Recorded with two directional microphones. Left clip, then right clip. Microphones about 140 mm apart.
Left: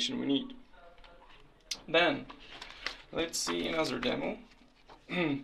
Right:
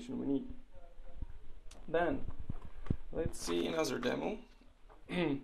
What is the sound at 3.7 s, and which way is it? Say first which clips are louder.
Speech: left 3 dB; 45° right (ahead or behind).